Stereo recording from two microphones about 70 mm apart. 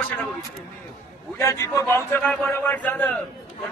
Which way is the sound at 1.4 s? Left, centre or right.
Left.